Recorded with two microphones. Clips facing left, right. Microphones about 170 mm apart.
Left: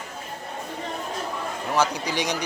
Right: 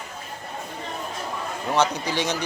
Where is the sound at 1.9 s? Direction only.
15° left (ahead or behind).